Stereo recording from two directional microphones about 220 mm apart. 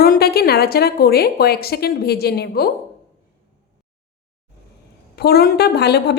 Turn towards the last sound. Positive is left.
turn(degrees=50)  # may be behind; listen again after turning